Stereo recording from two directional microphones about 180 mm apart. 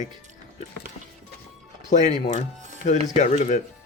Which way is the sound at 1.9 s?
40° left (ahead or behind).